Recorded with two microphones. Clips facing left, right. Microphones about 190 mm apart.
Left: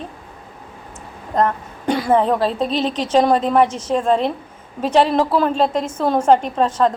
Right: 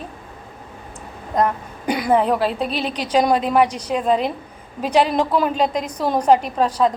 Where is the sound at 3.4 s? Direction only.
10° right (ahead or behind).